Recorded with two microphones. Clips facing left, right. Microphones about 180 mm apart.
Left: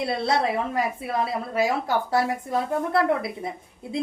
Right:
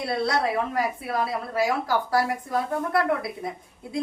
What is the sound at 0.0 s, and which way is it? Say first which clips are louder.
Speech: left 1 dB; 25° left (ahead or behind).